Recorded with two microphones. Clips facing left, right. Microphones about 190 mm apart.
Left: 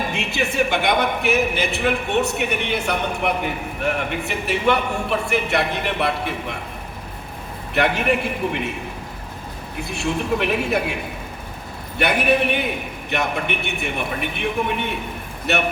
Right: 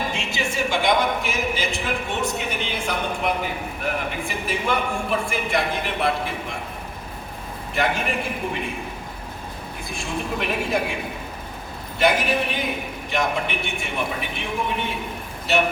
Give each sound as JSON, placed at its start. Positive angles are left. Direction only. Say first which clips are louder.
{"t": 0.1, "sound": "a man's voice", "louder": "left 3 dB", "side_deg": 60}
{"t": 7.8, "sound": "a man's voice", "louder": "left 4 dB", "side_deg": 65}
{"t": 9.9, "sound": "a man's voice", "louder": "left 6 dB", "side_deg": 70}
{"t": 11.9, "sound": "a man's voice", "louder": "left 2 dB", "side_deg": 65}